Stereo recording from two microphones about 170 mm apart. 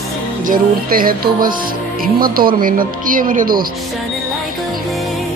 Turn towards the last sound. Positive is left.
turn(degrees=-55)  # may be behind; listen again after turning